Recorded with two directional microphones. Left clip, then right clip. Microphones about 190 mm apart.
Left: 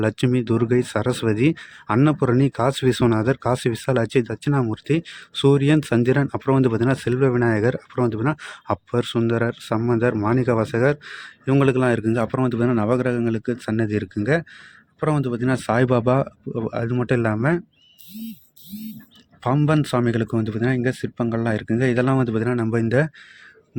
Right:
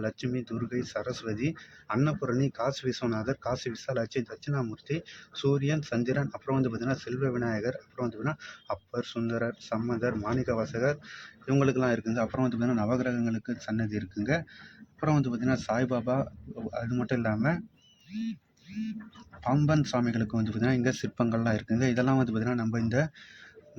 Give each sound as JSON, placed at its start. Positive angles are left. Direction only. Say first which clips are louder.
{"t": 0.0, "sound": "speech", "louder": "left 12 dB", "side_deg": 55}
{"t": 19.4, "sound": "speech", "louder": "left 7 dB", "side_deg": 45}